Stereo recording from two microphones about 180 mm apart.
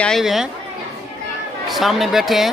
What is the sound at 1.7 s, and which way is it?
Speech, centre (ahead or behind).